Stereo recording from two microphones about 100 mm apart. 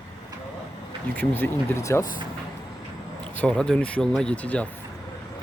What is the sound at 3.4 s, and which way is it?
Speech, 10° left (ahead or behind).